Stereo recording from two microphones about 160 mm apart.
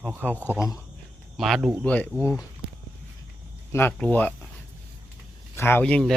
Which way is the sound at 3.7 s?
15° left (ahead or behind).